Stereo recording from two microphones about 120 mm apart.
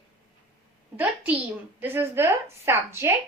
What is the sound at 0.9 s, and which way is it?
A woman's voice, 15° right (ahead or behind).